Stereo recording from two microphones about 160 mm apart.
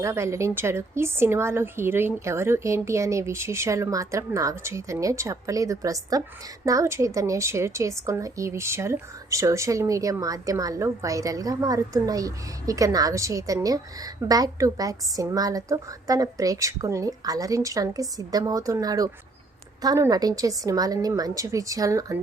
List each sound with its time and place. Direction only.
0.0 s a woman's voice: 15° right (ahead or behind)